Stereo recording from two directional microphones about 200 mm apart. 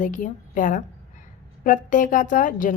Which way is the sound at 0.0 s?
40° left (ahead or behind).